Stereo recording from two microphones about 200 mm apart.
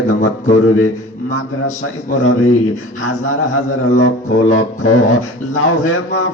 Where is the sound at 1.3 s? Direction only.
80° left.